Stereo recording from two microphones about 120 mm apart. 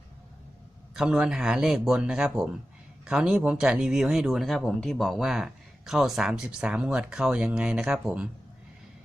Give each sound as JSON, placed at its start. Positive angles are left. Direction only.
{"t": 0.9, "sound": "speech", "side_deg": -5}